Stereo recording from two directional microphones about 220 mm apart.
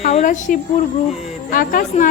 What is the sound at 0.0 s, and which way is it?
A woman's voice, 35° left (ahead or behind).